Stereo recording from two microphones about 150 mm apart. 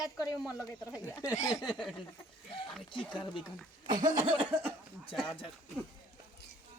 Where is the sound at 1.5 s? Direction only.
5° right (ahead or behind).